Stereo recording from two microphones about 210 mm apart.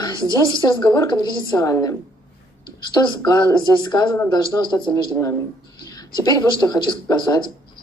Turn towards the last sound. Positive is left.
turn(degrees=20)  # may be behind; listen again after turning